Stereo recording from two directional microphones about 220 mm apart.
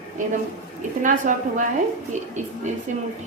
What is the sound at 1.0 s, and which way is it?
Speech, 35° right (ahead or behind).